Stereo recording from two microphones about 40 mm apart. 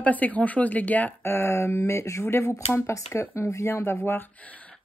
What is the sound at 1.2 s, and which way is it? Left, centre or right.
Speech, left.